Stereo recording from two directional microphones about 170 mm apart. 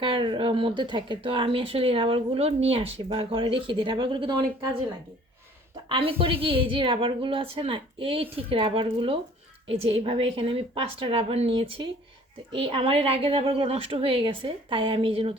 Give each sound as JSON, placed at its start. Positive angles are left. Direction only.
{"t": 0.0, "sound": "speech", "side_deg": -30}